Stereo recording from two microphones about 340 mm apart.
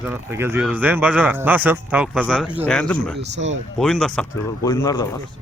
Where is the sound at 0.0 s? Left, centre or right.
Centre.